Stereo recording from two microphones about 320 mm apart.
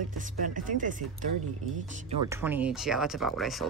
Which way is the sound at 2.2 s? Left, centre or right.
Centre.